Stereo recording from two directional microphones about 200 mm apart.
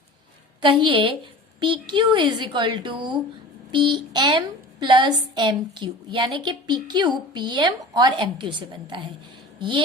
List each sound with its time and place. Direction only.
0.6 s a woman's voice: 25° right (ahead or behind)